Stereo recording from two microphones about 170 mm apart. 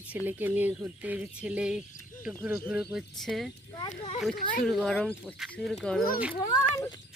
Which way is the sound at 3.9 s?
40° left (ahead or behind).